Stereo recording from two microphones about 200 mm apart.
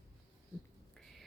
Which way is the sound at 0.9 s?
Centre (ahead or behind).